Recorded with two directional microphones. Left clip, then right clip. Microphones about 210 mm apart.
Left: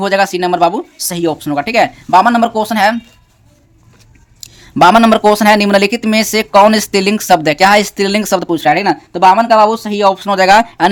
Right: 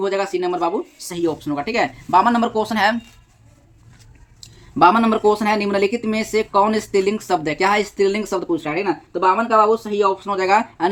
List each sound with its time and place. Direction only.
0.0 s speech: 45° left (ahead or behind); by 3.0 s 30° left (ahead or behind)
4.4 s a sound: 30° left (ahead or behind)
4.8 s speech: 50° left (ahead or behind)